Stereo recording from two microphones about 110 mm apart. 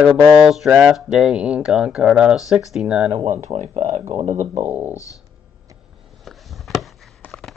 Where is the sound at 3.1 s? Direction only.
80° right.